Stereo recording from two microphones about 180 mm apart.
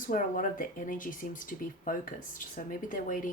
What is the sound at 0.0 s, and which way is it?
Speech, 50° left (ahead or behind).